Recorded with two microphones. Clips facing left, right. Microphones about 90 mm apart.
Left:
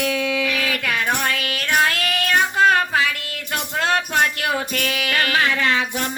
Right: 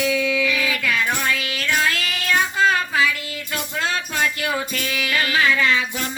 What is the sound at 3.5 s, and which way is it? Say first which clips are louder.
Music: left 4 dB; 60° left (ahead or behind).